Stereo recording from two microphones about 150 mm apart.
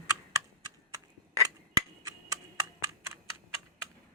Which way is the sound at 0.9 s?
25° right (ahead or behind).